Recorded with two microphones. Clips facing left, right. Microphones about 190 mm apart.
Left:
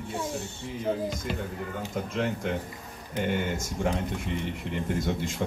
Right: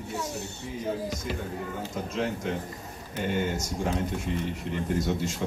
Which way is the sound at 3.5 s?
55° left (ahead or behind).